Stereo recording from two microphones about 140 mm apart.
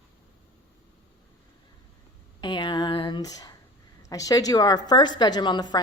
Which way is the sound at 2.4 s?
30° left (ahead or behind).